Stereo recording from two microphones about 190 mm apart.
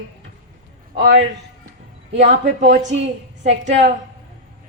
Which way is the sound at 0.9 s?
70° right (ahead or behind).